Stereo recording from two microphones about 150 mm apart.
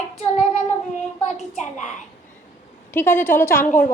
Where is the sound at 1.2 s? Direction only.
50° left (ahead or behind).